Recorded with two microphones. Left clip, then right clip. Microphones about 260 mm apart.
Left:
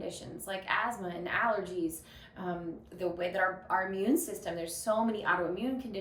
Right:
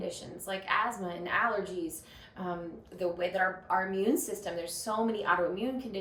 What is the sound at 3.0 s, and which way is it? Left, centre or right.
A woman's voice, centre.